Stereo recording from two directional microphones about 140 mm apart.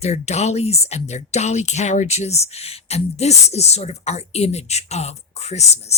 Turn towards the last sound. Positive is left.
turn(degrees=50)  # may be behind; listen again after turning